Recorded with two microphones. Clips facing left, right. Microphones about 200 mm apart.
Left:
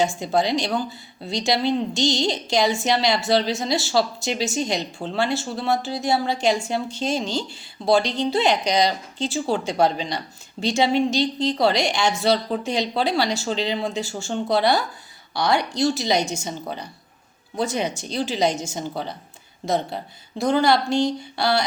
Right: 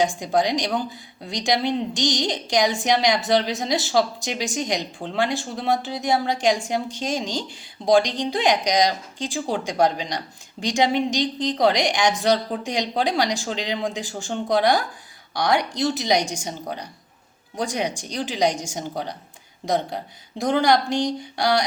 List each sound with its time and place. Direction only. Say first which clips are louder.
0.0 s a woman's voice: even; 15° right (ahead or behind)